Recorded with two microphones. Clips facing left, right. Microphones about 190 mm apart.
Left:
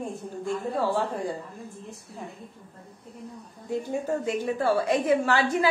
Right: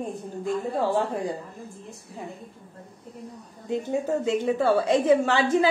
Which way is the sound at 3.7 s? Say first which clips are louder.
Right 2 dB; 20° right (ahead or behind).